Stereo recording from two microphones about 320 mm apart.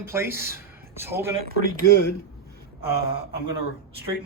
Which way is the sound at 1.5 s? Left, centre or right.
Right.